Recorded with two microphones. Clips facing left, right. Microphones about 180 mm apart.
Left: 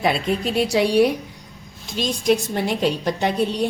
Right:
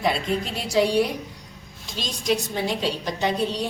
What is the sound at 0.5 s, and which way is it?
Speech, 65° left (ahead or behind).